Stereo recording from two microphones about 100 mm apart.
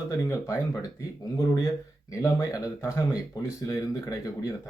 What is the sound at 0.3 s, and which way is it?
Speech, 25° left (ahead or behind).